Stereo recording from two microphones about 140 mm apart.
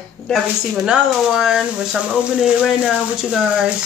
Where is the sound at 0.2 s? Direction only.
25° left (ahead or behind).